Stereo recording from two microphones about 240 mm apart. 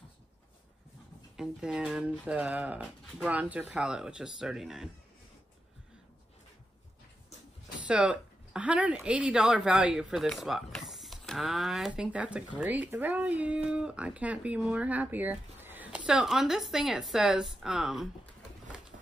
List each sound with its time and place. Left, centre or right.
1.3 s speech: centre
7.8 s a woman's voice: centre